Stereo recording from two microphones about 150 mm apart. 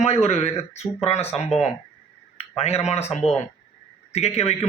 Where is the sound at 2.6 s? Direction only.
45° left (ahead or behind).